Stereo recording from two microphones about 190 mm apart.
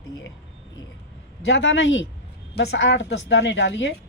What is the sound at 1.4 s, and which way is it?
Speech, 80° left.